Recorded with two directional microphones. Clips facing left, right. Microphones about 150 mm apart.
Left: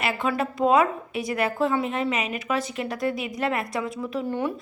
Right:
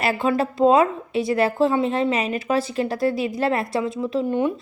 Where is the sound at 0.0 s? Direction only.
35° right (ahead or behind).